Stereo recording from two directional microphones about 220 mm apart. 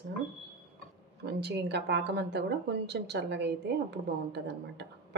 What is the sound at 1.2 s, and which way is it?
Speech, 50° right (ahead or behind).